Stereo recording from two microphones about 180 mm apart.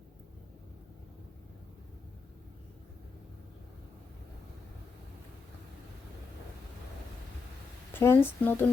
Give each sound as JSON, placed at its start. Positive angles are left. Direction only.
{"t": 7.9, "sound": "speech", "side_deg": 10}